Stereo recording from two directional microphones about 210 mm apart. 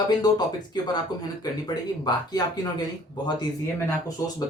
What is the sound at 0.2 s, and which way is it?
Speech, 20° left (ahead or behind).